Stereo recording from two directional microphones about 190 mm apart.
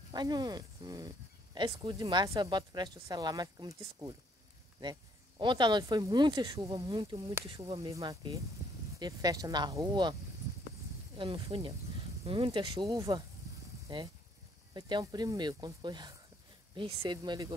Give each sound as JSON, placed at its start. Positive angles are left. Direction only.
{"t": 0.1, "sound": "speech", "side_deg": -20}
{"t": 5.4, "sound": "speech", "side_deg": -25}
{"t": 11.1, "sound": "speech", "side_deg": -25}